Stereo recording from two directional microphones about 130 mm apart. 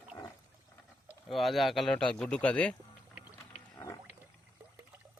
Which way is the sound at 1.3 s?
Centre (ahead or behind).